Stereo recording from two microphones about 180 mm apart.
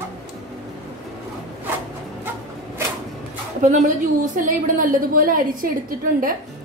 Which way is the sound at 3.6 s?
40° right (ahead or behind).